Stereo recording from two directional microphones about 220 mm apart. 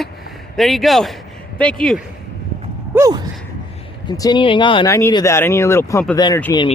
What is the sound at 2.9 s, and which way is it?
Sigh, 15° right (ahead or behind).